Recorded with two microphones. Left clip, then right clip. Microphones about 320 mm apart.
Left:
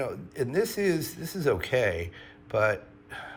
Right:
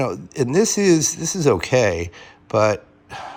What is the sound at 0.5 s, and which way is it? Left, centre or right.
Speech, centre.